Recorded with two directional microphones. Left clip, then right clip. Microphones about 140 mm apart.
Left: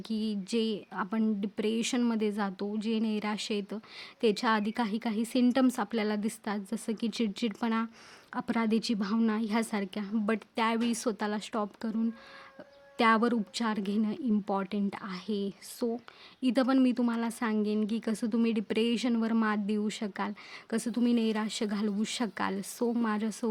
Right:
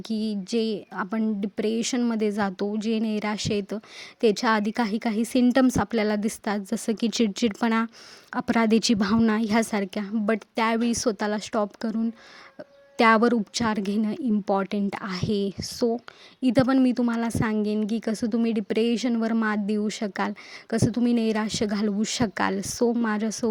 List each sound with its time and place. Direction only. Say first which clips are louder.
0.1 s a woman's voice: right 5 dB; 40° right (ahead or behind)